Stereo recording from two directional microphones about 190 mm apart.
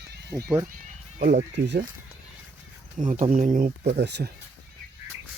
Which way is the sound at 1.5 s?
65° right (ahead or behind).